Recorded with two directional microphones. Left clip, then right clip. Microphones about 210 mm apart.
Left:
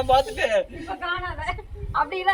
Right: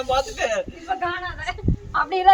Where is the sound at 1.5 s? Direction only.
40° right (ahead or behind).